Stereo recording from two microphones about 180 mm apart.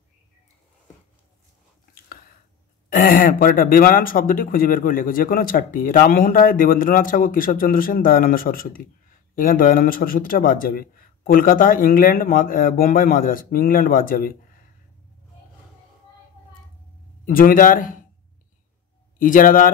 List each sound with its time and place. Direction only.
2.9 s speech: 50° left (ahead or behind)
17.3 s speech: 50° left (ahead or behind)
19.1 s speech: 45° left (ahead or behind)